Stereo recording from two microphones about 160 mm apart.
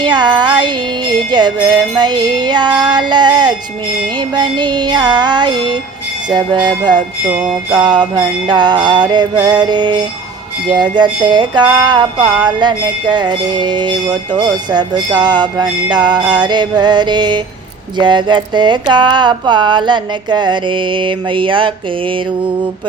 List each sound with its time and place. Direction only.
0.0 s music: 25° right (ahead or behind)